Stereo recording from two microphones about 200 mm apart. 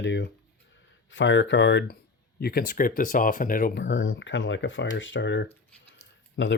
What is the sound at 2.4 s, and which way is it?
Speech, 45° left (ahead or behind).